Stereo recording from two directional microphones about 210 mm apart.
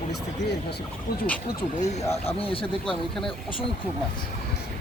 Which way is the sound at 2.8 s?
Centre (ahead or behind).